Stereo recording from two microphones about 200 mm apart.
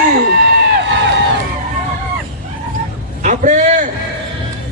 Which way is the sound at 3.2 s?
40° right (ahead or behind).